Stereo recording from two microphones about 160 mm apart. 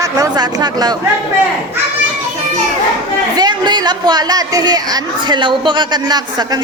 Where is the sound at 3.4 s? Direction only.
25° right (ahead or behind).